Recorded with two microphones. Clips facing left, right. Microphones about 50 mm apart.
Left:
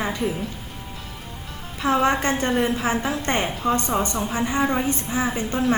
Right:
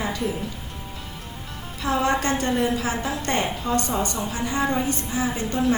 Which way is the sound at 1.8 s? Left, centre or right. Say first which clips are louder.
Left 2 dB; left.